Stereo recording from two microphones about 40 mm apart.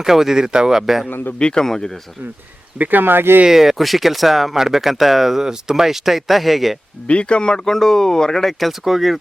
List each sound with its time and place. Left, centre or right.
0.0 s speech: centre
1.4 s speech: left
1.6 s speech: centre
2.7 s speech: right
3.0 s speech: right
3.5 s speech: centre
7.1 s speech: left; by 8.5 s centre
8.5 s speech: centre